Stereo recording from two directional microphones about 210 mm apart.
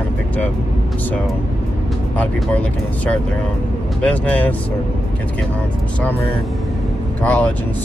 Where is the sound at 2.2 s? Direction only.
5° left (ahead or behind).